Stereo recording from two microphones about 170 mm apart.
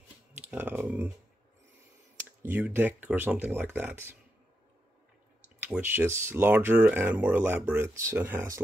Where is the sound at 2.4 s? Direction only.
10° right (ahead or behind).